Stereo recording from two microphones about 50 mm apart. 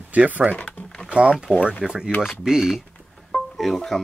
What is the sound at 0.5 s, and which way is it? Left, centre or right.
Speech, left.